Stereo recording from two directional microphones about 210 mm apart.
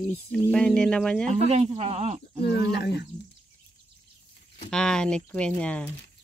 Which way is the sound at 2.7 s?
55° left (ahead or behind).